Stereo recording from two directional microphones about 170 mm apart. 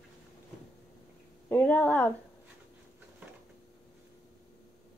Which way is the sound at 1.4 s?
10° left (ahead or behind).